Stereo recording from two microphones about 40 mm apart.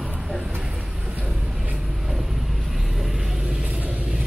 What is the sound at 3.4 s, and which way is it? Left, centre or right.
Vehicle, right.